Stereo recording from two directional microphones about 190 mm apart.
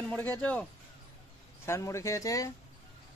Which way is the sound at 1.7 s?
15° left (ahead or behind).